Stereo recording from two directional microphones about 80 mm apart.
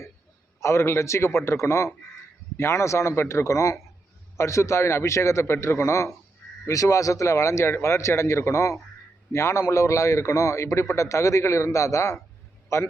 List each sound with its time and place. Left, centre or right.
0.6 s a man's voice: left